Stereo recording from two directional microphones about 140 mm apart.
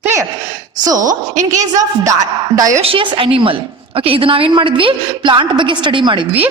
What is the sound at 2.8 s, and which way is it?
A woman's voice, 35° right (ahead or behind).